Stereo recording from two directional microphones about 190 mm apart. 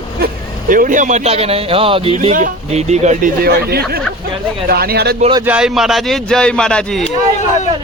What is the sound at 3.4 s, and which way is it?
Speech, 55° right (ahead or behind).